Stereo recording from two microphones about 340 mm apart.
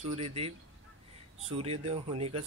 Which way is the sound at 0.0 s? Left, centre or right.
Centre.